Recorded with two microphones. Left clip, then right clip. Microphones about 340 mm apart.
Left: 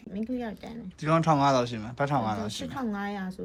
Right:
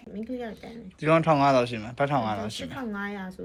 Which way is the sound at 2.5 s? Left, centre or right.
Left.